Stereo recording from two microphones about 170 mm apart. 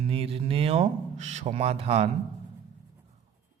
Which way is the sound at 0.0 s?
35° right (ahead or behind).